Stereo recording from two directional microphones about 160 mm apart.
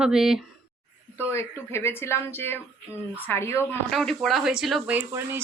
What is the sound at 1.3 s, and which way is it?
Speech, 15° left (ahead or behind).